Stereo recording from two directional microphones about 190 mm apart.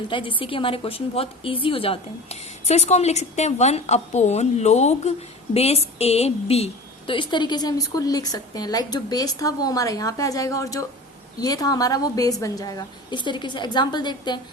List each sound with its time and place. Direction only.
0.1 s a woman's voice: 25° left (ahead or behind)